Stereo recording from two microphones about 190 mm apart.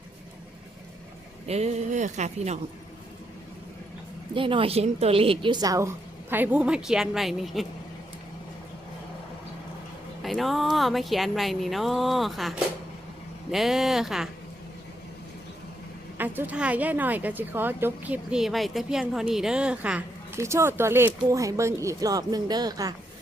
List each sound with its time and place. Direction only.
1.5 s speech: 35° right (ahead or behind)
4.4 s a woman's voice: 25° right (ahead or behind); by 7.7 s centre (ahead or behind)
10.2 s speech: centre (ahead or behind)
16.1 s speech: 10° right (ahead or behind)